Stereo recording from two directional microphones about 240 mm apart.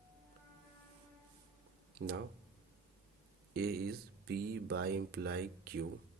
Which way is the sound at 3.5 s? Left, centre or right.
Right.